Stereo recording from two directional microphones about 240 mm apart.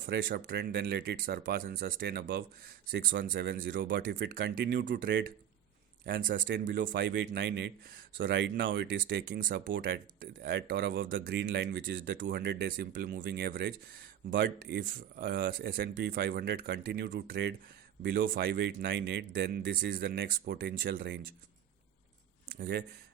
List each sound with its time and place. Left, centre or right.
0.0 s speech: right
6.1 s speech: right
22.5 s speech: right